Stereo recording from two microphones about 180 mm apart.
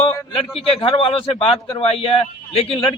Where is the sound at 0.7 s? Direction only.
30° left (ahead or behind).